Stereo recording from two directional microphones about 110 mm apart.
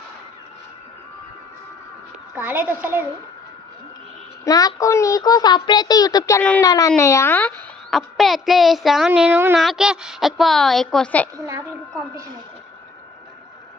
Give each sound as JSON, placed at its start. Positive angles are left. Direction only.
{"t": 2.3, "sound": "a woman's voice", "side_deg": -15}
{"t": 4.4, "sound": "a child's voice", "side_deg": 30}
{"t": 7.9, "sound": "a woman's voice", "side_deg": 0}
{"t": 9.3, "sound": "a woman's voice", "side_deg": -20}
{"t": 9.6, "sound": "a woman's voice", "side_deg": -5}
{"t": 11.3, "sound": "a woman's voice", "side_deg": -30}